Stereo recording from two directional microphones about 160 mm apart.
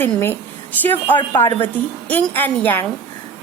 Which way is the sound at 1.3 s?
15° left (ahead or behind).